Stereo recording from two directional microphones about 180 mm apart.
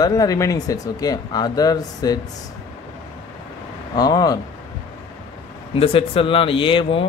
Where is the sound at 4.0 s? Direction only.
20° left (ahead or behind).